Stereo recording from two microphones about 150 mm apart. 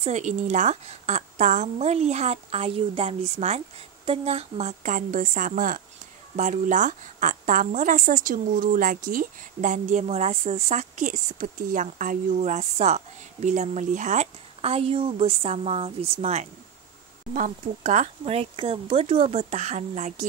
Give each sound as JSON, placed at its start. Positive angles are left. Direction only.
{"t": 0.0, "sound": "a woman's voice", "side_deg": -50}
{"t": 6.3, "sound": "a woman's voice", "side_deg": -50}
{"t": 17.8, "sound": "a woman's voice", "side_deg": -45}